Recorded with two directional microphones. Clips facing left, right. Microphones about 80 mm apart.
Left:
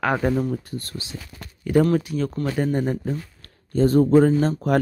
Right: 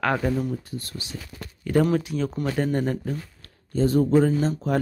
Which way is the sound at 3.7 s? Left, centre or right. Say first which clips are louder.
Left 4 dB; left.